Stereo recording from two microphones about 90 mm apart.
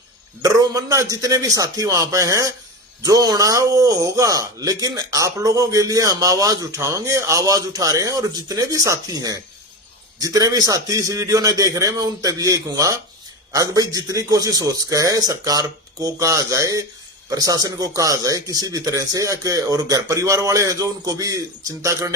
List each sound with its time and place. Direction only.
0.4 s speech: 40° right (ahead or behind)